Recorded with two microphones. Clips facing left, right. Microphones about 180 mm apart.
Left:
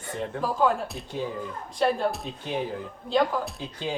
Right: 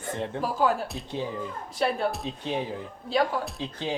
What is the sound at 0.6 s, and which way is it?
Music, 5° right (ahead or behind).